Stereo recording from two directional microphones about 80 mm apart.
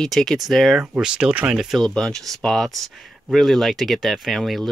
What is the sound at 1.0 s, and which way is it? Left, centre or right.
Speech, centre.